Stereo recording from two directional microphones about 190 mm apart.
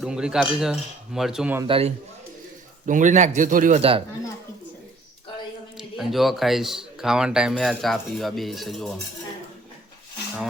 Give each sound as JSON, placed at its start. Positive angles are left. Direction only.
{"t": 0.0, "sound": "speech", "side_deg": -5}
{"t": 1.6, "sound": "a man's voice", "side_deg": -30}
{"t": 2.8, "sound": "a man's voice", "side_deg": -40}
{"t": 3.8, "sound": "a man's voice", "side_deg": -30}
{"t": 5.7, "sound": "speech", "side_deg": 0}